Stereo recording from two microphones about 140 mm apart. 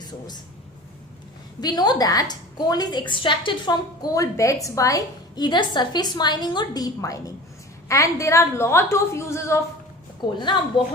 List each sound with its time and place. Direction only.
0.0 s speech: 30° left (ahead or behind)
1.6 s a woman's voice: 30° left (ahead or behind)
10.2 s a woman's voice: 35° left (ahead or behind)